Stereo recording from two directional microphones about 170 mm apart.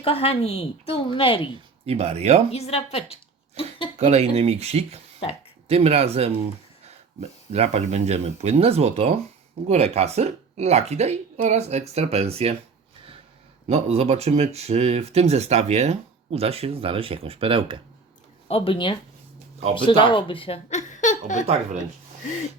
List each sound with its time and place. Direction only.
0.0 s a woman's voice: 35° left (ahead or behind)
1.9 s speech: 40° right (ahead or behind)
2.5 s a woman's voice: 35° left (ahead or behind)
3.9 s speech: 40° right (ahead or behind)
13.7 s speech: 40° right (ahead or behind)
18.4 s a woman's voice: 35° left (ahead or behind)